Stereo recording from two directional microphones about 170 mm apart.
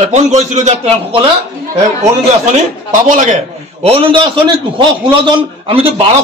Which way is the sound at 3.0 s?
50° right (ahead or behind).